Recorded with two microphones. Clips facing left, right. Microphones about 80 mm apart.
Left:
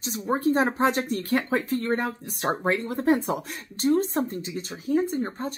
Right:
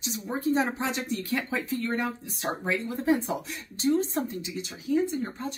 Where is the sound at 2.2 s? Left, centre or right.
Left.